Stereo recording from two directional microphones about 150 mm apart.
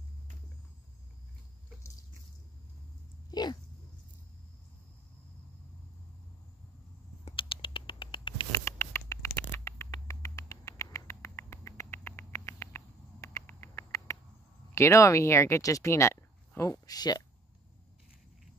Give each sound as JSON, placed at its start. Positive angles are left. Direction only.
{"t": 3.3, "sound": "dog", "side_deg": 30}
{"t": 7.2, "sound": "patter", "side_deg": 35}
{"t": 8.6, "sound": "patter", "side_deg": 15}
{"t": 10.0, "sound": "rodents", "side_deg": 20}
{"t": 14.7, "sound": "speech", "side_deg": 20}